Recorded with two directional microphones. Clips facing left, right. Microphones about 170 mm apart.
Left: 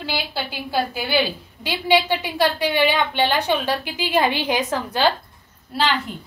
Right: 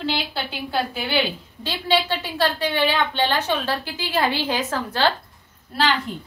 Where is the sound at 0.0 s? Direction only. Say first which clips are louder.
Right 1 dB; 10° left (ahead or behind).